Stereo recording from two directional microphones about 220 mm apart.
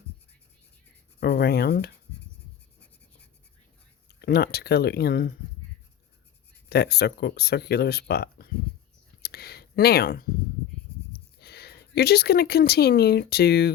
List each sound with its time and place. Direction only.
1.2 s speech: 45° left (ahead or behind)
4.2 s speech: 45° left (ahead or behind)
6.7 s speech: 45° left (ahead or behind)
9.2 s a sound: 45° left (ahead or behind)
11.1 s speech: 45° left (ahead or behind)